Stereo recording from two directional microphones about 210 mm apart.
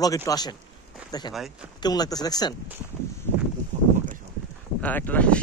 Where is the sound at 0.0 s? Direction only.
15° left (ahead or behind).